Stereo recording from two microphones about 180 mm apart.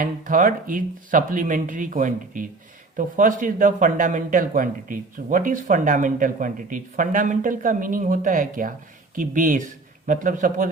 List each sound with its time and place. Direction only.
0.0 s speech: 50° right (ahead or behind)